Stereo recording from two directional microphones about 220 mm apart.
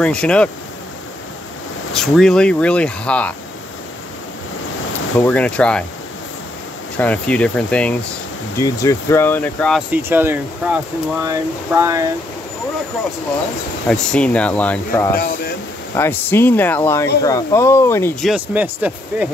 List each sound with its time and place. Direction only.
0.0 s speech: 5° left (ahead or behind)
2.0 s speech: centre (ahead or behind)
5.2 s speech: 5° left (ahead or behind)
7.0 s speech: 5° left (ahead or behind); by 12.1 s 15° right (ahead or behind)
13.8 s speech: 5° left (ahead or behind)
15.1 s speech: 45° left (ahead or behind)
16.0 s speech: 10° left (ahead or behind)
18.2 s speech: 5° right (ahead or behind)